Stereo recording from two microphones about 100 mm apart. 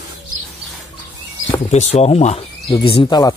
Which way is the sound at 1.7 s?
90° left.